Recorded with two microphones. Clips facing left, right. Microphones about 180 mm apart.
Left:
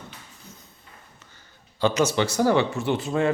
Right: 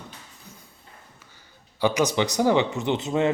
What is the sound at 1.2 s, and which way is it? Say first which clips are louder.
Speech: even; 10° right (ahead or behind).